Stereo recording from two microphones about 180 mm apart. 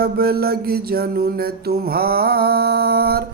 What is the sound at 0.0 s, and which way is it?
Speech, 60° right (ahead or behind).